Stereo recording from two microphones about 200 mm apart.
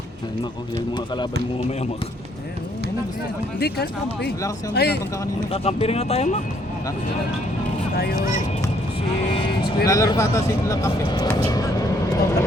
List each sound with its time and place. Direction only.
0.9 s speech: 20° left (ahead or behind)
3.6 s speech: 55° left (ahead or behind)
5.5 s speech: 30° left (ahead or behind)
9.8 s speech: 15° left (ahead or behind)